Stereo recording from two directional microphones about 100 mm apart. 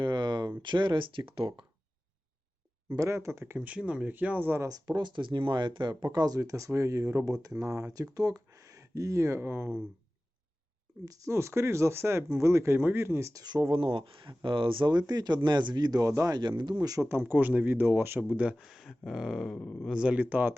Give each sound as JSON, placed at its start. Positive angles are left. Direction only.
{"t": 0.0, "sound": "a sound", "side_deg": -50}
{"t": 0.6, "sound": "speech", "side_deg": -50}
{"t": 2.9, "sound": "speech", "side_deg": -30}
{"t": 4.7, "sound": "speech", "side_deg": -45}
{"t": 11.0, "sound": "speech", "side_deg": -35}
{"t": 13.4, "sound": "speech", "side_deg": -40}
{"t": 13.7, "sound": "speech", "side_deg": -60}
{"t": 16.4, "sound": "speech", "side_deg": -50}
{"t": 16.8, "sound": "speech", "side_deg": -35}
{"t": 17.1, "sound": "speech", "side_deg": -20}
{"t": 18.6, "sound": "a sound", "side_deg": -5}
{"t": 19.5, "sound": "speech", "side_deg": 15}
{"t": 19.9, "sound": "speech", "side_deg": -10}